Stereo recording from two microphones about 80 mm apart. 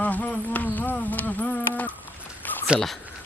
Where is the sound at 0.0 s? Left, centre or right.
Centre.